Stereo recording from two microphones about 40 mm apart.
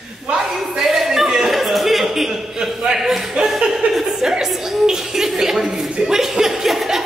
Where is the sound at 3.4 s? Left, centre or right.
Centre.